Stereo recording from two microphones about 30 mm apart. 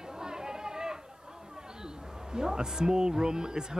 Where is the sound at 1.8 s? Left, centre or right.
Right.